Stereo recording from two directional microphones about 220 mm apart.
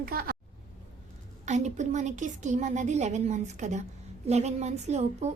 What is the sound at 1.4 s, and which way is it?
A woman's voice, 30° right (ahead or behind).